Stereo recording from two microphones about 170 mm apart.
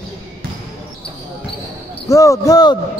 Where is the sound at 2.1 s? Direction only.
20° left (ahead or behind).